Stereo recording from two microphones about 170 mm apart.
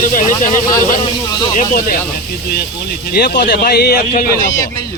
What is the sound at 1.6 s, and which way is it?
Speech, 55° left (ahead or behind).